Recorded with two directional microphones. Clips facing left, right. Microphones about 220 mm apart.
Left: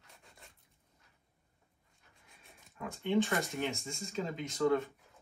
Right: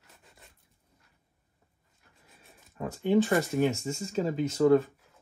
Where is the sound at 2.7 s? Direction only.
40° right (ahead or behind).